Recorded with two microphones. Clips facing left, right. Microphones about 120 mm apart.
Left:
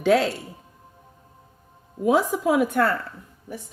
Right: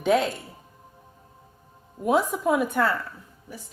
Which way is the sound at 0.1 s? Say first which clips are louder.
Left 2 dB; 90° left.